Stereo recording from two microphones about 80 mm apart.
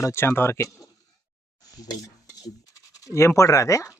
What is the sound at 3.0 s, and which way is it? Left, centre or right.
Speech, left.